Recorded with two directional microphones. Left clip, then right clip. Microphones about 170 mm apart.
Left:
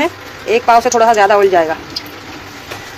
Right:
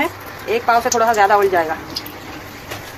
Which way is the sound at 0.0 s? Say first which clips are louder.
Left 4 dB; 35° left (ahead or behind).